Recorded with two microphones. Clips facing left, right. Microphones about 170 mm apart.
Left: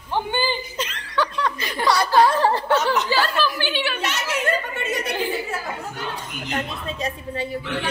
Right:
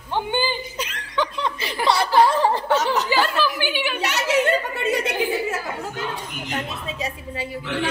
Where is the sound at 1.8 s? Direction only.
20° right (ahead or behind).